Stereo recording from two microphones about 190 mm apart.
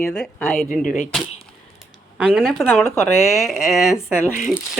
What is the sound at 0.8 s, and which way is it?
Speech, 40° left (ahead or behind).